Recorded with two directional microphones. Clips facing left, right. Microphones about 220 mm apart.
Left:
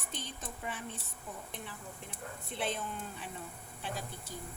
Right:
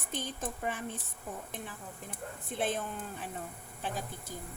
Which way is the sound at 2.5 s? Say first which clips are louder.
Right 4 dB; 45° right (ahead or behind).